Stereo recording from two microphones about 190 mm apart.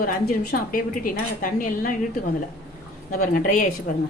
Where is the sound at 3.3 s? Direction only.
45° left (ahead or behind).